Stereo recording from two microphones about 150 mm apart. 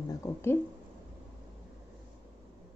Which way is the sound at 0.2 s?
15° left (ahead or behind).